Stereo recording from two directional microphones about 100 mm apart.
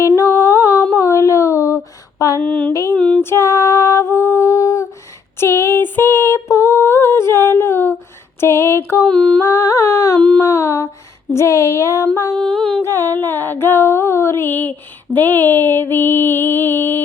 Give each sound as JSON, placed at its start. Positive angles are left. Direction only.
{"t": 0.2, "sound": "a capella", "side_deg": 25}
{"t": 0.9, "sound": "a sound", "side_deg": 30}
{"t": 2.9, "sound": "humming", "side_deg": 5}
{"t": 3.2, "sound": "a sound", "side_deg": 30}
{"t": 9.0, "sound": "humming", "side_deg": 5}
{"t": 9.4, "sound": "humming", "side_deg": 30}
{"t": 10.2, "sound": "a sound", "side_deg": 10}
{"t": 10.4, "sound": "a sound", "side_deg": 30}
{"t": 11.3, "sound": "music", "side_deg": 30}
{"t": 12.1, "sound": "humming", "side_deg": 30}
{"t": 12.4, "sound": "humming", "side_deg": 5}
{"t": 12.8, "sound": "music", "side_deg": 25}